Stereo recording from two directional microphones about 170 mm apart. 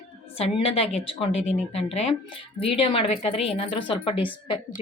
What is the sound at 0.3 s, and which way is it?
Speech, 35° left (ahead or behind).